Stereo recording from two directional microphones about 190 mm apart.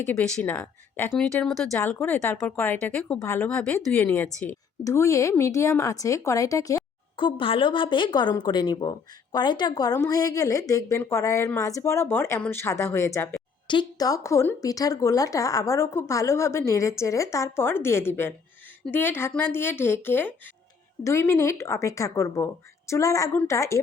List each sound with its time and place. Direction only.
0.0 s speech: 5° left (ahead or behind)